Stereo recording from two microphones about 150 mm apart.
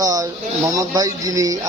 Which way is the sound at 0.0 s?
25° right (ahead or behind).